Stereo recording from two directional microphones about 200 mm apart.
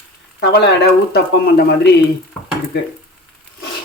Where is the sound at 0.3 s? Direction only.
55° left (ahead or behind).